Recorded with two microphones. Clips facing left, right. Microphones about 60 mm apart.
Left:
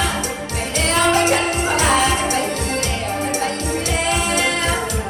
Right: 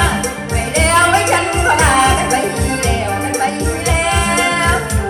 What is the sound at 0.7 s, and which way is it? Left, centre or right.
Music, right.